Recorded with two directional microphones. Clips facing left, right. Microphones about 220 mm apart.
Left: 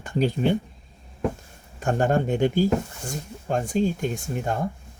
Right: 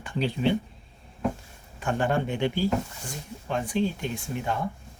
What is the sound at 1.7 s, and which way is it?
Speech, 45° left (ahead or behind).